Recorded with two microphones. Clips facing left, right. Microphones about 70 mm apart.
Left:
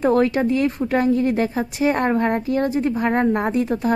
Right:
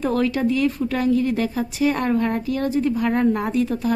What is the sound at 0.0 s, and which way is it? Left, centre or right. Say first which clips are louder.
A woman's voice: left 3 dB; left.